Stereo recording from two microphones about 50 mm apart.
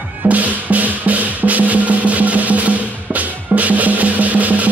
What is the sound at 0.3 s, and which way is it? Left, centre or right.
Drum, right.